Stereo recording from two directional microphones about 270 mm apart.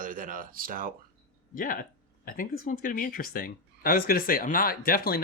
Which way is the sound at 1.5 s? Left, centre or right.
Left.